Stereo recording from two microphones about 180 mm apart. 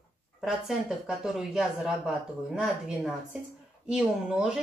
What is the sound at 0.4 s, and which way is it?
Speech, centre (ahead or behind).